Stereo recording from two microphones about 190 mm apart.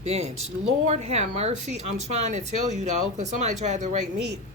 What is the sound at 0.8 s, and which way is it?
Speech, 35° right (ahead or behind).